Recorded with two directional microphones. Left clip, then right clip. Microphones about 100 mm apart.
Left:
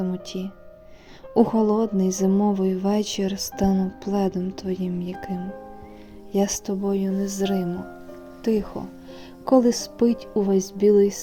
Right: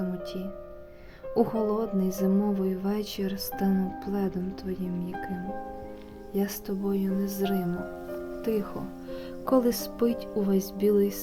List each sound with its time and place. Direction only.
0.0 s speech: 40° left (ahead or behind)
6.3 s speech: 45° left (ahead or behind)
9.5 s speech: 25° left (ahead or behind)